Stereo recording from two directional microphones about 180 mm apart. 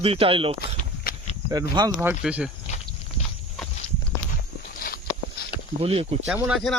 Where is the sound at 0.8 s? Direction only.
45° left (ahead or behind).